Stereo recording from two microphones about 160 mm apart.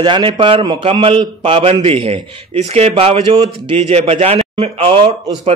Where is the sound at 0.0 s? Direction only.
30° right (ahead or behind).